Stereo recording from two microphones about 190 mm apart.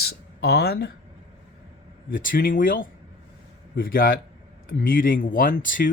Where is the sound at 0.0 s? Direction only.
60° left (ahead or behind).